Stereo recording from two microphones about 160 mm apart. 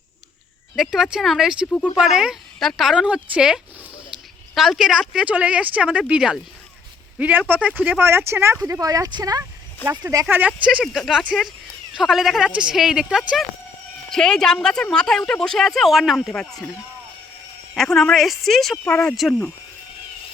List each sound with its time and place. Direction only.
0.8 s speech: centre (ahead or behind)
17.7 s speech: 5° left (ahead or behind)
18.9 s speech: 10° left (ahead or behind)